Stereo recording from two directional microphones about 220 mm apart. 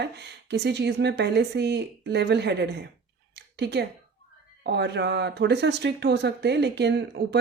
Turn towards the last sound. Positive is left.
turn(degrees=-50)  # may be behind; listen again after turning